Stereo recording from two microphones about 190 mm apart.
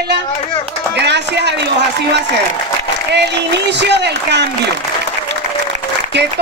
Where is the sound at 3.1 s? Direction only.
65° right (ahead or behind).